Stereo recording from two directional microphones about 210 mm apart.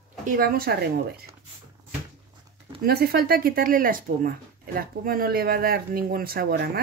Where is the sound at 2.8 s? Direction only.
45° right (ahead or behind).